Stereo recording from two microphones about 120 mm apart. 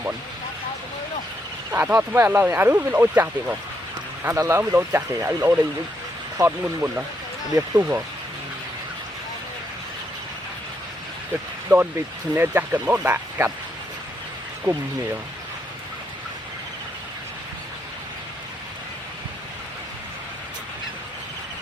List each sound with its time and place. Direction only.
1.7 s speech: 15° right (ahead or behind)
11.7 s speech: 20° right (ahead or behind)